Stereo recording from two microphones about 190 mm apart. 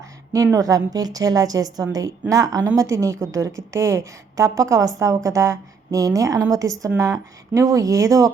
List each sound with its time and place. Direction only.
0.3 s a woman's voice: 15° right (ahead or behind)